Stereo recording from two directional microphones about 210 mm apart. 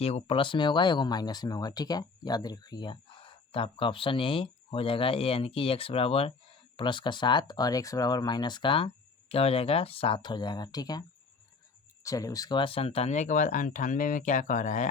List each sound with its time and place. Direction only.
0.0 s speech: 30° left (ahead or behind)
12.0 s speech: 15° left (ahead or behind); by 14.8 s 35° left (ahead or behind)